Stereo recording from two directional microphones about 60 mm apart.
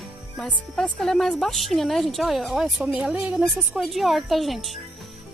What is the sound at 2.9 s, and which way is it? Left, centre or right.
Speech, centre.